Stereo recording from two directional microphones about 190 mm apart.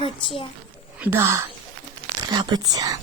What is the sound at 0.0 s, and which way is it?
Speech, 30° left (ahead or behind).